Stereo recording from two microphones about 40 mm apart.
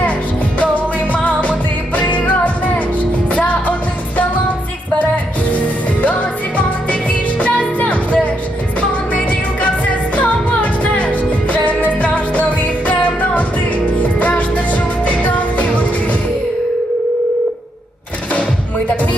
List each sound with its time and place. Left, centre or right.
0.6 s music: left
5.1 s music: left